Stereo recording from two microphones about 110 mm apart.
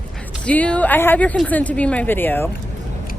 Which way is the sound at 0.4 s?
10° left (ahead or behind).